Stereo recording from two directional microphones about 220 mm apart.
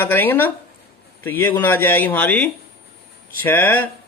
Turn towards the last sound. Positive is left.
turn(degrees=10)  # may be behind; listen again after turning